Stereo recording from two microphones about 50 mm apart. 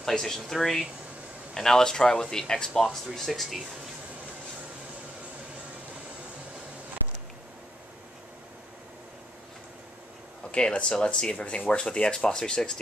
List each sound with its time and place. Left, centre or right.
0.0 s speech: centre
10.5 s speech: left